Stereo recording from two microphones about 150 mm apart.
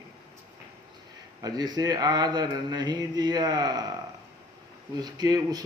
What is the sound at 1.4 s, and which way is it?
Speech, 25° right (ahead or behind).